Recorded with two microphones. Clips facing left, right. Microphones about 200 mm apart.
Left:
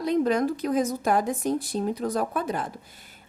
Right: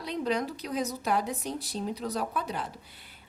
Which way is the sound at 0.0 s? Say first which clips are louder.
Left 7 dB; 45° left (ahead or behind).